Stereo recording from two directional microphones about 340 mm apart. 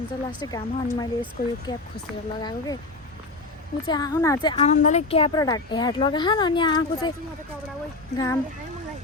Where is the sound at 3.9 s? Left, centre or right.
Centre.